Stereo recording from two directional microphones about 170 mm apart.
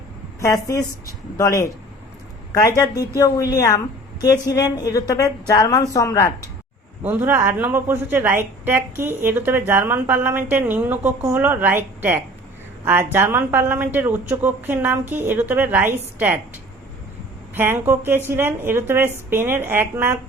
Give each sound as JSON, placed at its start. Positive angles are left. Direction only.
{"t": 0.3, "sound": "a woman's voice", "side_deg": 20}
{"t": 7.0, "sound": "a woman's voice", "side_deg": -10}
{"t": 17.5, "sound": "a woman's voice", "side_deg": -10}